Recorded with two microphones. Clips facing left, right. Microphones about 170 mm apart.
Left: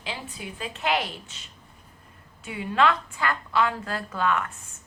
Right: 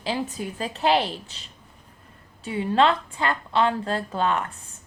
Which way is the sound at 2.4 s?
30° right (ahead or behind).